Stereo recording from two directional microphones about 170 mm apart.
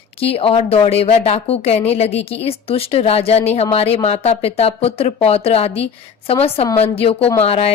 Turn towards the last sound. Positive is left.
turn(degrees=35)  # may be behind; listen again after turning